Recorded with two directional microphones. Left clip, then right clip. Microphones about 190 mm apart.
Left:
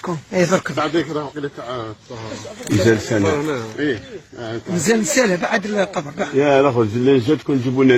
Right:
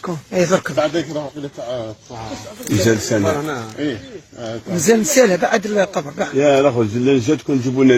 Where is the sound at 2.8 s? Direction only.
45° right (ahead or behind).